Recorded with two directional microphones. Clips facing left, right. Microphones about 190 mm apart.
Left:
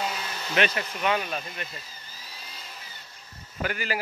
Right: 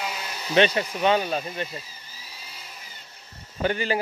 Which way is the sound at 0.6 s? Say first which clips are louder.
Right 6 dB; 30° right (ahead or behind).